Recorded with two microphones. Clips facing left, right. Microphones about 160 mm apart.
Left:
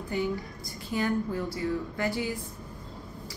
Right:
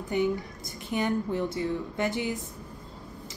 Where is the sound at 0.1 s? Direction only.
20° right (ahead or behind).